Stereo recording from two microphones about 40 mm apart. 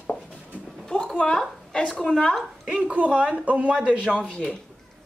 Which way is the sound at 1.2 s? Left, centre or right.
Left.